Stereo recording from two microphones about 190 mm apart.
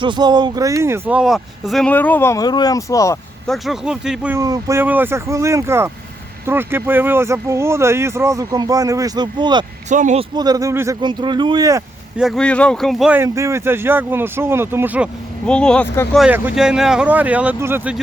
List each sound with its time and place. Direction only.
0.0 s speech: 25° right (ahead or behind); by 3.2 s 15° left (ahead or behind)
3.4 s speech: centre (ahead or behind)
4.4 s speech: 15° right (ahead or behind)
9.9 s speech: 40° right (ahead or behind)
10.3 s speech: 20° right (ahead or behind)
12.1 s speech: centre (ahead or behind)
15.4 s speech: 5° left (ahead or behind)
16.2 s speech: 5° right (ahead or behind)